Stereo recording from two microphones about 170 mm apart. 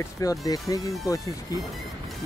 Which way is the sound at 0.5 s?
20° left (ahead or behind).